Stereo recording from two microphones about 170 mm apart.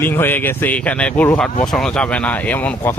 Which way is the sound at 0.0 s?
10° left (ahead or behind).